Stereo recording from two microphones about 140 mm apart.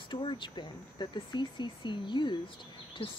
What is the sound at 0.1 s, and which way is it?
A woman's voice, 35° left (ahead or behind).